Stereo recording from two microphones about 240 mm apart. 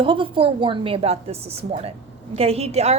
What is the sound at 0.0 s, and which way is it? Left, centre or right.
A woman's voice, right.